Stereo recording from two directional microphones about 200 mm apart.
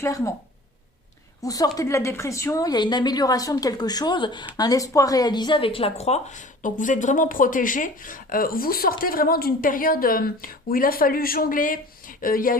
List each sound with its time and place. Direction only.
0.0 s speech: 15° left (ahead or behind)
1.4 s a woman's voice: 20° left (ahead or behind); by 12.5 s 45° left (ahead or behind)